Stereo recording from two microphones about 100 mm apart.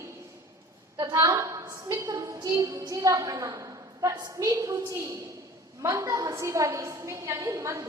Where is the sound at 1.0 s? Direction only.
30° right (ahead or behind).